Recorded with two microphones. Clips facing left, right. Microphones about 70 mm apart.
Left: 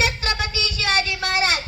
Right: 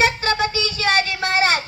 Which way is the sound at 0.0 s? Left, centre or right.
Right.